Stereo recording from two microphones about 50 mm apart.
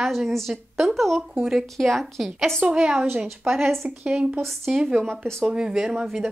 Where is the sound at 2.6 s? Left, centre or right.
Centre.